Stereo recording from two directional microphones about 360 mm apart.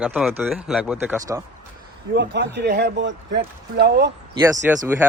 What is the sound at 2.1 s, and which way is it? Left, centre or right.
Speech, right.